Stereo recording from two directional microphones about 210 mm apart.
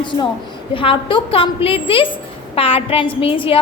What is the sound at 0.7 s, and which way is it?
A woman's voice, 25° left (ahead or behind).